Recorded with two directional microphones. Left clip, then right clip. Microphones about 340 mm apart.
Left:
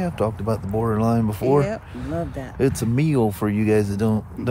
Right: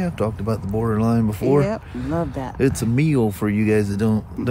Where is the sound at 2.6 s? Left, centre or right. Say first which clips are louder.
Right 1 dB; centre.